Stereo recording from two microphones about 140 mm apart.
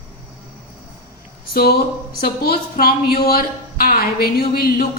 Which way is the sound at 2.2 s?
90° left.